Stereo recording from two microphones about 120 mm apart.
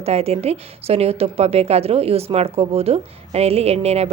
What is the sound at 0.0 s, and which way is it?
Speech, 60° right (ahead or behind).